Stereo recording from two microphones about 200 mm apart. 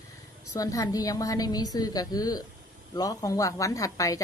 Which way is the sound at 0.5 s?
15° left (ahead or behind).